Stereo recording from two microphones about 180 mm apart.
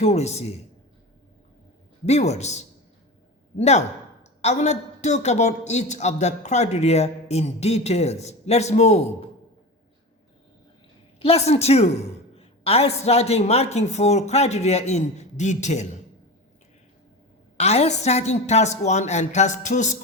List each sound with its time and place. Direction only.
0.0 s a man's voice: 35° left (ahead or behind)
2.0 s a man's voice: 35° left (ahead or behind)
11.2 s a man's voice: 35° left (ahead or behind)
17.6 s a man's voice: 35° left (ahead or behind)